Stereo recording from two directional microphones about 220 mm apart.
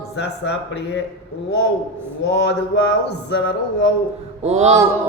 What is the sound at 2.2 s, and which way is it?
Mantra, 50° left (ahead or behind).